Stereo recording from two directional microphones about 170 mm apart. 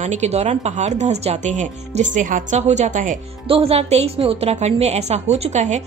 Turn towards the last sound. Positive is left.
turn(degrees=-45)  # may be behind; listen again after turning